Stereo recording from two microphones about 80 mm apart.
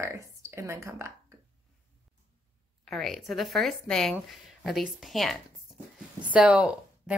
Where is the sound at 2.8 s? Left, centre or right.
Centre.